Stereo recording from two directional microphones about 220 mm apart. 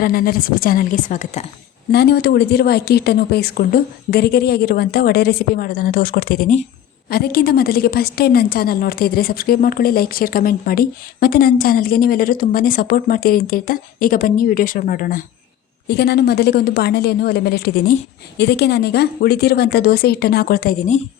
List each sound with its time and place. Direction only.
0.0 s a woman's voice: 40° left (ahead or behind)
1.9 s a woman's voice: 45° left (ahead or behind)